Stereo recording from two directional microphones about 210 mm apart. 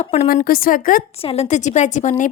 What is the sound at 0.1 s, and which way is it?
A woman's voice, 35° left (ahead or behind).